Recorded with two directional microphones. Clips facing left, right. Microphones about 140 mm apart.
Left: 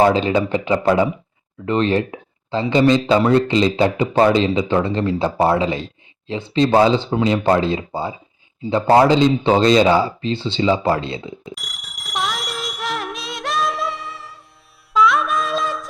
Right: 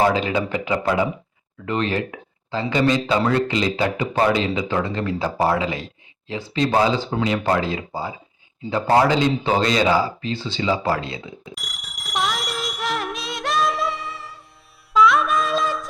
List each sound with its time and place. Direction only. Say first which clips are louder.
0.1 s speech: left 4 dB; 30° left (ahead or behind)
11.5 s a sound: left 2 dB; centre (ahead or behind)
14.9 s music: even; centre (ahead or behind)